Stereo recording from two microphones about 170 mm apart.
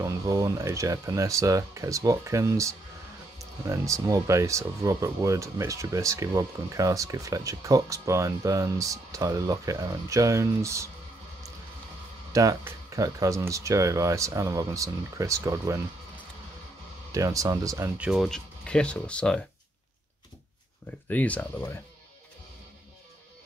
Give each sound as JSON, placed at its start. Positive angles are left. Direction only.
{"t": 0.0, "sound": "speech", "side_deg": -20}
{"t": 12.3, "sound": "speech", "side_deg": -20}
{"t": 17.1, "sound": "speech", "side_deg": -20}
{"t": 17.9, "sound": "speech", "side_deg": -5}
{"t": 21.1, "sound": "speech", "side_deg": 10}